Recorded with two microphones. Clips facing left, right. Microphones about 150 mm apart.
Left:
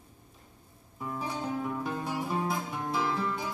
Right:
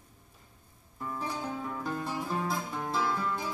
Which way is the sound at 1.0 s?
15° left (ahead or behind).